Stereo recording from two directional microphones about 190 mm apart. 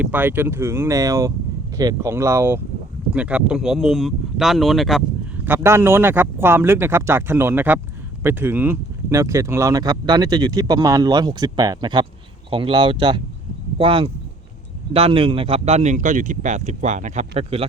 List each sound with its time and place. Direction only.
0.0 s speech: 10° right (ahead or behind)
5.5 s speech: 15° right (ahead or behind); by 17.7 s 30° right (ahead or behind)